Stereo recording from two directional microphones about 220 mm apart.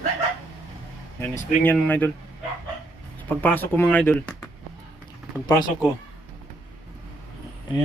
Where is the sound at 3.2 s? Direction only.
10° left (ahead or behind).